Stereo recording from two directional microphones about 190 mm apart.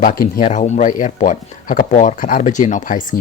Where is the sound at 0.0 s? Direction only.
45° left (ahead or behind).